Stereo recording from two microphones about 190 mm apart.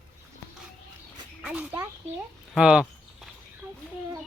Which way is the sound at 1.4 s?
5° right (ahead or behind).